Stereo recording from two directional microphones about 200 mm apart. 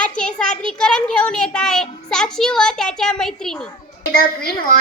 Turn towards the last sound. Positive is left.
turn(degrees=45)  # may be behind; listen again after turning